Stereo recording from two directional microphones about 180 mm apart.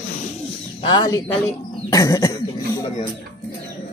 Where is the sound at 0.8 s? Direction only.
25° left (ahead or behind).